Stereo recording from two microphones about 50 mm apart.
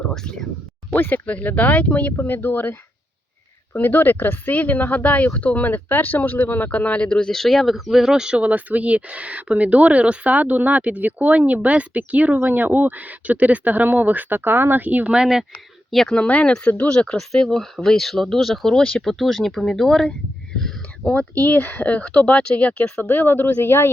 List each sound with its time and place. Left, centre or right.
0.1 s speech: centre
0.9 s speech: left
2.1 s speech: left
7.3 s speech: centre
7.9 s speech: centre
8.4 s speech: right
15.0 s speech: centre
16.0 s speech: left
17.2 s speech: centre
19.2 s speech: centre
20.6 s a sound: centre
21.1 s speech: left